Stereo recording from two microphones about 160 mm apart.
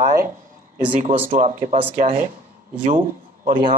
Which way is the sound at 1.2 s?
50° right (ahead or behind).